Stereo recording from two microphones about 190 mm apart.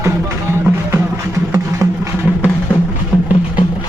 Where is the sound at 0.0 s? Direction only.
15° right (ahead or behind).